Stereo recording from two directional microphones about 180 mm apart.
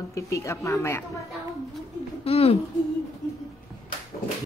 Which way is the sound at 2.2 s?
35° left (ahead or behind).